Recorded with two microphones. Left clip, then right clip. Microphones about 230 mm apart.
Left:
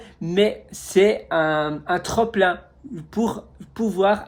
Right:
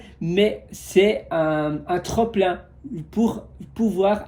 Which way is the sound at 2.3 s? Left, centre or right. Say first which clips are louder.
Left 2 dB; centre.